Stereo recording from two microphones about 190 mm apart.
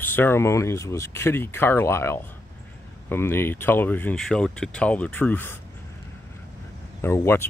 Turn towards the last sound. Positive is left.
turn(degrees=10)  # may be behind; listen again after turning